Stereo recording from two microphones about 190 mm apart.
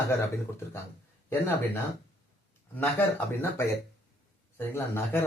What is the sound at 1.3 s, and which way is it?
Speech, 10° left (ahead or behind).